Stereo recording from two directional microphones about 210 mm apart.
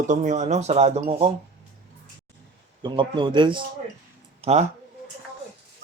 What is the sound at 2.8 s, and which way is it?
Speech, 20° right (ahead or behind).